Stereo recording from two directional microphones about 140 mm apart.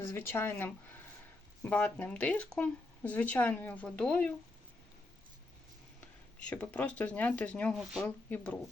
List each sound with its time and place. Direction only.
0.0 s speech: 15° left (ahead or behind)
6.4 s speech: 10° left (ahead or behind)
7.8 s speech: centre (ahead or behind)